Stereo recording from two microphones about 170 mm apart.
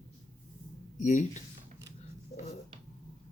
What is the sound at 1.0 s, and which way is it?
Speech, 45° left (ahead or behind).